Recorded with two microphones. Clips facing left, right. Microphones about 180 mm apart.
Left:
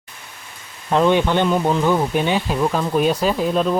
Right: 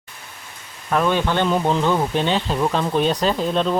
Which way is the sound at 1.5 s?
Centre (ahead or behind).